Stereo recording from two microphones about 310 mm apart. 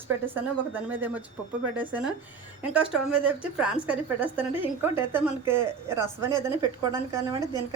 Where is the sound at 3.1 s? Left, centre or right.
Centre.